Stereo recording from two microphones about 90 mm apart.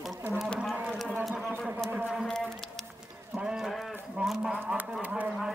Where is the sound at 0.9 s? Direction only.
5° left (ahead or behind).